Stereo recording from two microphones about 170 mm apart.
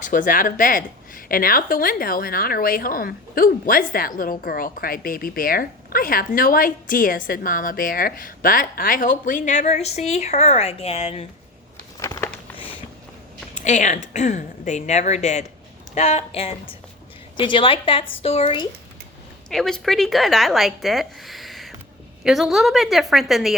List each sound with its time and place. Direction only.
0.0 s a woman's voice: 50° left (ahead or behind)
11.9 s crumpling: 20° left (ahead or behind)
13.6 s a woman's voice: 45° left (ahead or behind)
19.5 s a woman's voice: 5° left (ahead or behind)